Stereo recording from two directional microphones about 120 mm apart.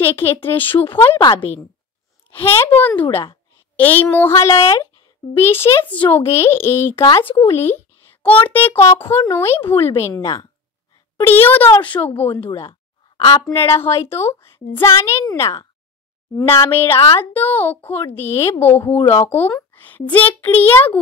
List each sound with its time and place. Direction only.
0.0 s a woman's voice: 15° left (ahead or behind)
2.3 s a woman's voice: 20° left (ahead or behind)
11.1 s a woman's voice: 15° left (ahead or behind)
13.5 s a child's voice: 20° left (ahead or behind)